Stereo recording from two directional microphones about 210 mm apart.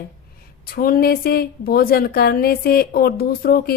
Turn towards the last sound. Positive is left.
turn(degrees=45)  # may be behind; listen again after turning